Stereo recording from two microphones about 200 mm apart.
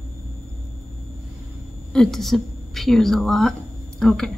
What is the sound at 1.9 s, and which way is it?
A woman's voice, 5° left (ahead or behind).